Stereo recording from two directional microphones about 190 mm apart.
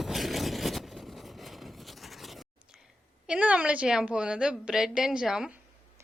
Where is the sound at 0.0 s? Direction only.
Centre (ahead or behind).